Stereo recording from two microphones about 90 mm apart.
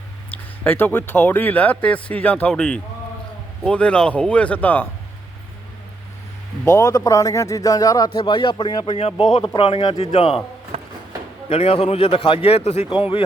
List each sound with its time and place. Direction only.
0.6 s speech: 20° left (ahead or behind)
6.7 s a man's voice: 30° left (ahead or behind)
6.9 s speech: 40° left (ahead or behind)
8.1 s speech: 70° left (ahead or behind)
9.6 s speech: 85° left
11.6 s speech: 90° left